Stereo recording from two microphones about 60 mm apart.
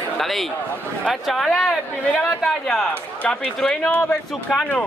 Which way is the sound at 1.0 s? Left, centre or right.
Centre.